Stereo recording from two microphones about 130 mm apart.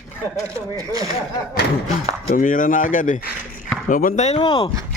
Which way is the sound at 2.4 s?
90° left.